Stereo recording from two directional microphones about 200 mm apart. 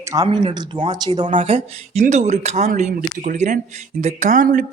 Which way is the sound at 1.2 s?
30° right (ahead or behind).